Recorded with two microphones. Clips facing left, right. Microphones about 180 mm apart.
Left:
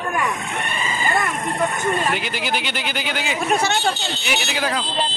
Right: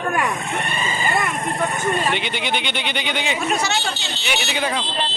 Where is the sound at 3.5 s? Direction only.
55° left (ahead or behind).